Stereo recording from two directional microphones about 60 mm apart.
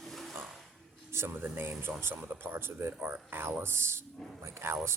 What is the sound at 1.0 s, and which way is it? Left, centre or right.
Speech, right.